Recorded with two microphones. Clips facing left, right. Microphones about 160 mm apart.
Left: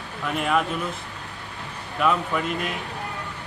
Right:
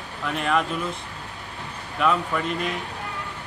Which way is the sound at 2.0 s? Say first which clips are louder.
Even; 5° left (ahead or behind).